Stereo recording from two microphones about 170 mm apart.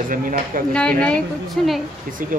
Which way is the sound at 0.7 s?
5° left (ahead or behind).